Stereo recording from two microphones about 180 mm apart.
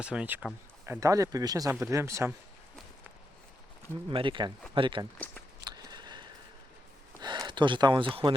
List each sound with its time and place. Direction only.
0.0 s speech: 5° right (ahead or behind)
4.1 s speech: 30° right (ahead or behind)
5.1 s speech: 5° left (ahead or behind)
5.6 s a sound: 25° right (ahead or behind)
7.2 s speech: 25° right (ahead or behind)